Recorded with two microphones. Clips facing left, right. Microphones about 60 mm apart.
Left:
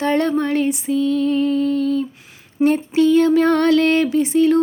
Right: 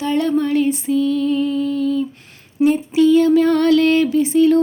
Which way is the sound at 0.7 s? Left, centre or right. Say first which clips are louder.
Right 1 dB; left.